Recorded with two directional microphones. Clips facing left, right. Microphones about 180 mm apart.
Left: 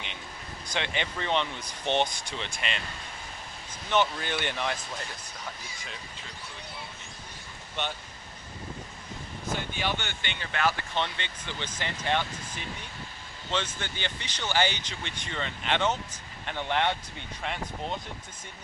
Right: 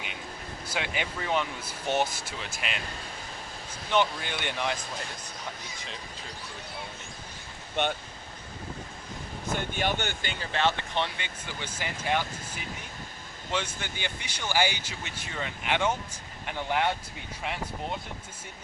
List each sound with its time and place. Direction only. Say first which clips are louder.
0.6 s speech: left 1 dB; 5° right (ahead or behind)
9.7 s speech: right 3 dB; 45° right (ahead or behind); by 12.2 s 10° right (ahead or behind)
13.5 s speech: even; 10° right (ahead or behind)